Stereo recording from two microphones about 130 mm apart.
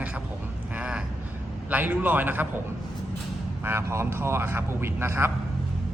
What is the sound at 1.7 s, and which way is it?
Speech, 15° right (ahead or behind).